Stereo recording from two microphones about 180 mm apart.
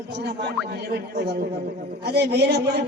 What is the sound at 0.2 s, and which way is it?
A woman's voice, 70° right (ahead or behind).